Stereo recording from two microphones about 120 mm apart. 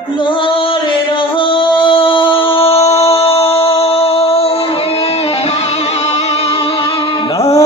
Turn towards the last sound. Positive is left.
turn(degrees=60)  # may be behind; listen again after turning